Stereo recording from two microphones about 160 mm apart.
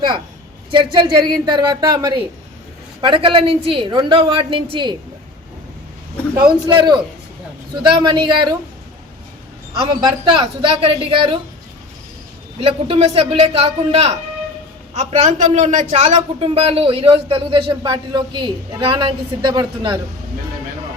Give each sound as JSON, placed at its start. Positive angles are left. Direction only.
{"t": 0.7, "sound": "a man's voice", "side_deg": -30}
{"t": 6.7, "sound": "a man's voice", "side_deg": -30}
{"t": 9.8, "sound": "a woman's voice", "side_deg": -30}
{"t": 12.5, "sound": "a woman's voice", "side_deg": -35}